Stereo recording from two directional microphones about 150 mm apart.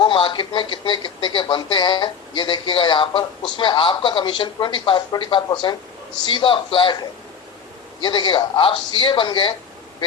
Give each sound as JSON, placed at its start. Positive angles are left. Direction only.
{"t": 0.0, "sound": "speech", "side_deg": 30}
{"t": 8.0, "sound": "speech", "side_deg": 30}